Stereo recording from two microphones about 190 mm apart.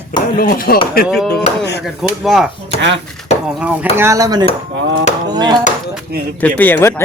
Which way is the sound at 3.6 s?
5° right (ahead or behind).